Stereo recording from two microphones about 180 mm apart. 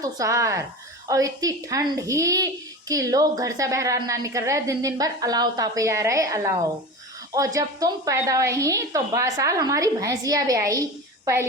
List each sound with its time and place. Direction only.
0.0 s a woman's voice: 20° right (ahead or behind)